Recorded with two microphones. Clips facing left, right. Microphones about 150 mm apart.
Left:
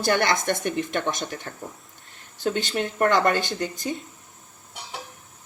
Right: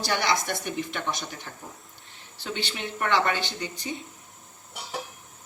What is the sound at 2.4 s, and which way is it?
Speech, 45° left (ahead or behind).